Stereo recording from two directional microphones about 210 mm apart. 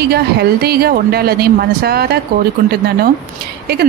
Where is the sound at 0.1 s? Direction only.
50° right (ahead or behind).